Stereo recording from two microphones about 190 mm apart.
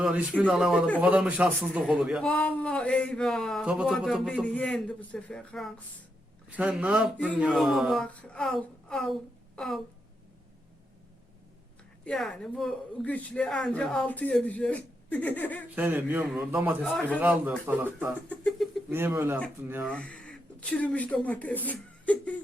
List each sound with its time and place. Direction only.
0.0 s a man's voice: 5° right (ahead or behind)
6.5 s a man's voice: 5° right (ahead or behind)
12.0 s a man's voice: 5° left (ahead or behind)
15.7 s a man's voice: 10° right (ahead or behind)
18.3 s a man's voice: 5° left (ahead or behind)
18.9 s a man's voice: 10° right (ahead or behind)
19.9 s speech: 5° left (ahead or behind)